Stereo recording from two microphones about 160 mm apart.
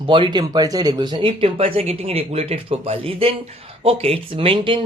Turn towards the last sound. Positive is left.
turn(degrees=-35)  # may be behind; listen again after turning